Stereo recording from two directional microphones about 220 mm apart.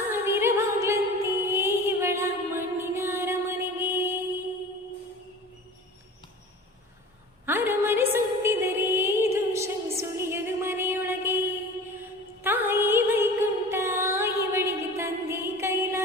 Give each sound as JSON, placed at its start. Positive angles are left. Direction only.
{"t": 0.1, "sound": "music", "side_deg": -10}
{"t": 7.4, "sound": "a sound", "side_deg": -10}
{"t": 12.4, "sound": "music", "side_deg": -10}